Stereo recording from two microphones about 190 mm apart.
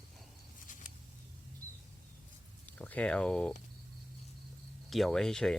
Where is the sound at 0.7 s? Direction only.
40° left (ahead or behind).